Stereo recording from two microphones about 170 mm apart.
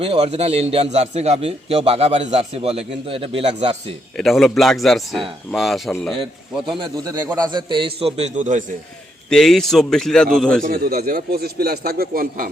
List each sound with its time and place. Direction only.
0.0 s a man's voice: 35° right (ahead or behind)
4.2 s a man's voice: centre (ahead or behind)
6.7 s a man's voice: 25° right (ahead or behind); by 8.6 s 45° right (ahead or behind)
9.3 s a man's voice: centre (ahead or behind)
10.6 s a man's voice: 55° right (ahead or behind)